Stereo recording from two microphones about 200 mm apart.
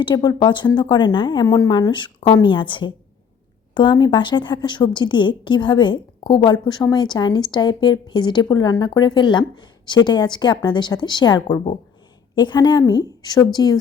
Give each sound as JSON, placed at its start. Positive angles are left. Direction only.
{"t": 0.0, "sound": "a woman's voice", "side_deg": 20}